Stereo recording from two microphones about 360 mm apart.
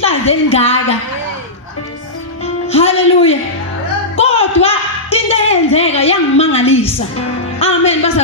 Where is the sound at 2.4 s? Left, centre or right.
Centre.